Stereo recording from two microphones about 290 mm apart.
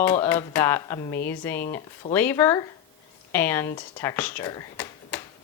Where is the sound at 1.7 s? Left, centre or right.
Centre.